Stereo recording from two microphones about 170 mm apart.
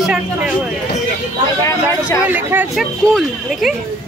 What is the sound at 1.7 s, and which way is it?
Speech, 20° left (ahead or behind).